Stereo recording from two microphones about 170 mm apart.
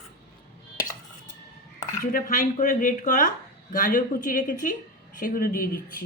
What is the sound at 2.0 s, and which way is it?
Speech, 55° left (ahead or behind).